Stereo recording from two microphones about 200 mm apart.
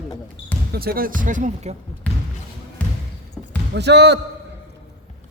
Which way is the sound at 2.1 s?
10° left (ahead or behind).